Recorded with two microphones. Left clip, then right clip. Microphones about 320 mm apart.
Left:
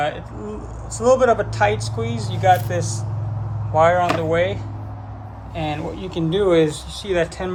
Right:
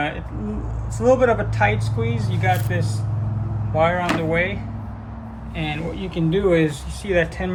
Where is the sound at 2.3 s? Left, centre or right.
Left.